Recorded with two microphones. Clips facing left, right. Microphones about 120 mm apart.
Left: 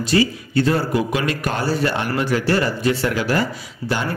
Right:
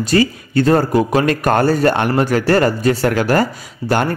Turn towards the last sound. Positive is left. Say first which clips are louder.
# right 6 dB
turn(degrees=-50)  # may be behind; listen again after turning